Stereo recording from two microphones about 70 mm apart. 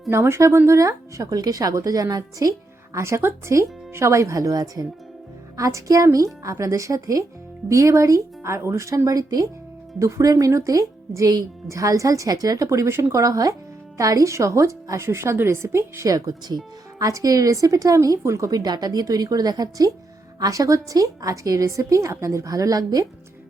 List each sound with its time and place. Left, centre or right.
0.1 s a woman's voice: right
2.9 s a woman's voice: right
9.0 s a woman's voice: right
12.6 s a woman's voice: right
16.0 s a woman's voice: right
18.5 s a woman's voice: right
20.4 s a woman's voice: right